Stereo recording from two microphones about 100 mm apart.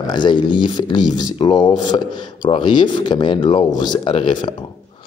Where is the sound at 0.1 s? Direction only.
50° left (ahead or behind).